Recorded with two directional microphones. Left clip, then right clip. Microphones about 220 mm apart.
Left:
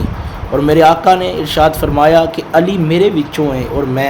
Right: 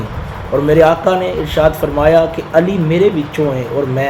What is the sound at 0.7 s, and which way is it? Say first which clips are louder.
A man's voice: left 2 dB; 25° left (ahead or behind).